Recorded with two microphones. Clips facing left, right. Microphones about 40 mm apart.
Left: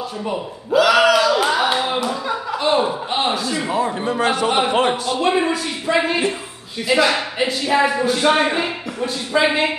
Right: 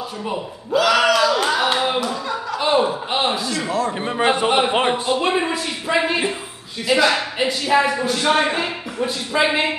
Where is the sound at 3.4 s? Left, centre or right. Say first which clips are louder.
Left 1 dB; centre.